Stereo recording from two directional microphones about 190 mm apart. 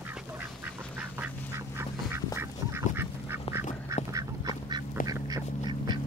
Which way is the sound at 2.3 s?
10° right (ahead or behind).